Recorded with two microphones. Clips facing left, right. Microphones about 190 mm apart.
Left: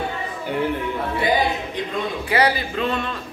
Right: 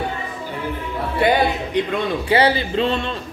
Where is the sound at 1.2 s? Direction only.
65° right (ahead or behind).